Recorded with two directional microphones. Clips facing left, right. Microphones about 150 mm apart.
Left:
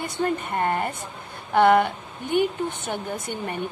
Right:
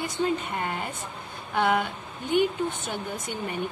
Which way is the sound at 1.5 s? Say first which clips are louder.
Left 7 dB; 60° left (ahead or behind).